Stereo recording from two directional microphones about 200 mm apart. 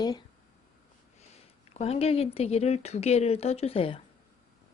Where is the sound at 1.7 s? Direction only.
30° left (ahead or behind).